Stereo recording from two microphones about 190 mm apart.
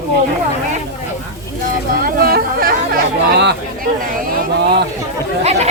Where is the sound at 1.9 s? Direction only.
50° right (ahead or behind).